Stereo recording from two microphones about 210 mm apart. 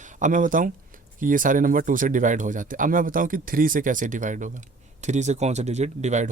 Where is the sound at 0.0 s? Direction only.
35° right (ahead or behind).